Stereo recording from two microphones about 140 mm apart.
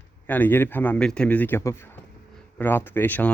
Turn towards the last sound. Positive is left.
turn(degrees=10)  # may be behind; listen again after turning